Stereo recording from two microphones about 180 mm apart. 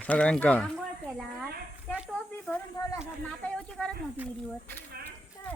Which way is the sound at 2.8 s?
15° left (ahead or behind).